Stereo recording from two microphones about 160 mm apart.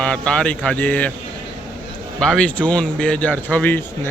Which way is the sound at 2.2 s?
5° left (ahead or behind).